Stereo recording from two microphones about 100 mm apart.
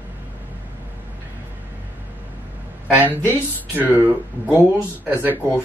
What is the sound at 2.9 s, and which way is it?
Speech, 15° right (ahead or behind).